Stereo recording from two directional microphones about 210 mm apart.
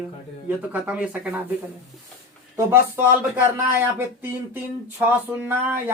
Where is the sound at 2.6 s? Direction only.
10° right (ahead or behind).